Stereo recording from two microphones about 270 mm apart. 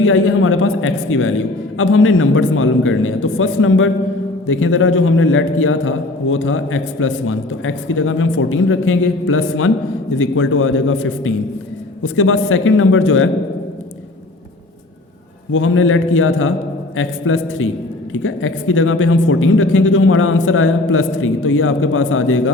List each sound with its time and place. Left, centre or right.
0.0 s a man's voice: left
15.5 s a man's voice: left